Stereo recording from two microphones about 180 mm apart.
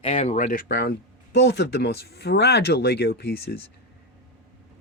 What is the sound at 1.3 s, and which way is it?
Speech, 70° left (ahead or behind).